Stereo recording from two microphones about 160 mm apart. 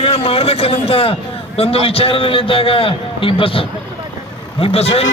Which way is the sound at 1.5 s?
35° left (ahead or behind).